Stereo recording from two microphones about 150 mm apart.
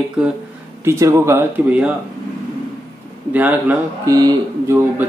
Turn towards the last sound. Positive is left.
turn(degrees=-15)  # may be behind; listen again after turning